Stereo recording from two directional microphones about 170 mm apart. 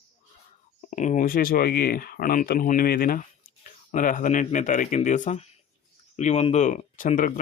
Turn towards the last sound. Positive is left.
turn(degrees=50)  # may be behind; listen again after turning